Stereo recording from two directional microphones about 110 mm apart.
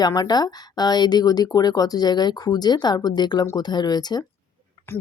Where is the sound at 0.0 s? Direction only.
40° left (ahead or behind).